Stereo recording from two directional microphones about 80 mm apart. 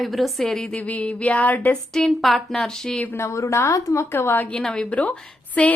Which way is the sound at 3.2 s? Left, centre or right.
Left.